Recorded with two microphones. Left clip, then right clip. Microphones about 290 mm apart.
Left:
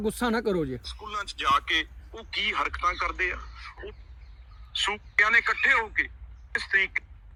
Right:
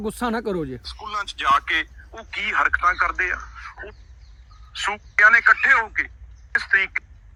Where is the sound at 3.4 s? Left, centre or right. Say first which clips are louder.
Right 6 dB; centre.